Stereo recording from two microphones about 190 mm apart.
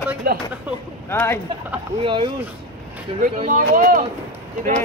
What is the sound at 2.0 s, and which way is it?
Speech, 25° right (ahead or behind).